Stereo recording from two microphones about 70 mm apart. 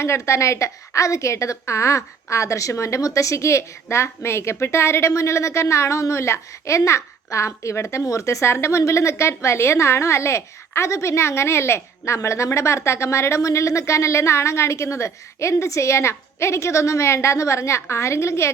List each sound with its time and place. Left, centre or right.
0.0 s a woman's voice: left